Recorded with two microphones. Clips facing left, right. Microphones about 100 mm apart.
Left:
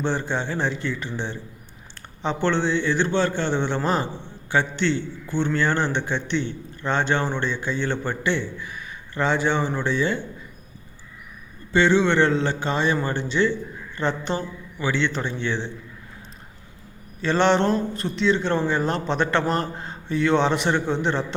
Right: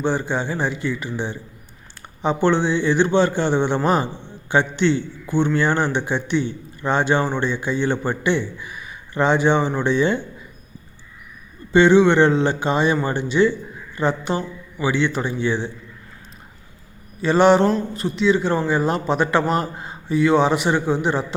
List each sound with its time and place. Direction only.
0.0 s a man's voice: 5° right (ahead or behind)
11.7 s a man's voice: 15° right (ahead or behind)
17.2 s a man's voice: 10° right (ahead or behind)